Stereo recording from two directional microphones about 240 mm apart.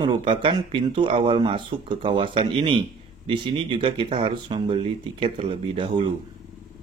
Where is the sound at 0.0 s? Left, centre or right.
Right.